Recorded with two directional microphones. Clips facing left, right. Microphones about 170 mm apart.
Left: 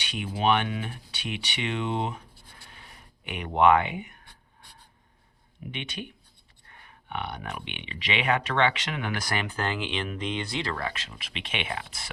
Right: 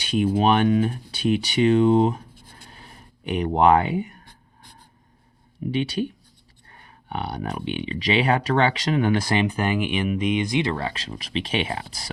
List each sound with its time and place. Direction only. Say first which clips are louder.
0.0 s speech: right 8 dB; 40° right (ahead or behind)
5.7 s speech: right 13 dB; 35° right (ahead or behind)